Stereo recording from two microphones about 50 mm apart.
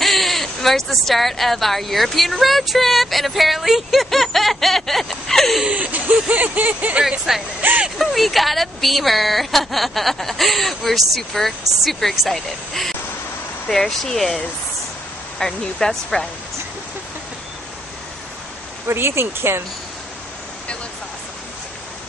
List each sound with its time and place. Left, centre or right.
0.0 s speech: centre
5.7 s speech: right
7.1 s speech: centre
18.9 s speech: right